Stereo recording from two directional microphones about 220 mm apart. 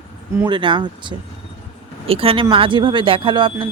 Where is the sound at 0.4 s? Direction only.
20° right (ahead or behind).